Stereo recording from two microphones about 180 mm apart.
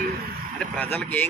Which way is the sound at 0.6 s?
10° left (ahead or behind).